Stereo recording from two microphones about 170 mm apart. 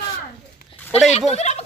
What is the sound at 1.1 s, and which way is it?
Speech, 40° left (ahead or behind).